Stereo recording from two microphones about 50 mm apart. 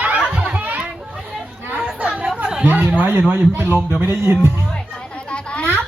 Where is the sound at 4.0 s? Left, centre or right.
Right.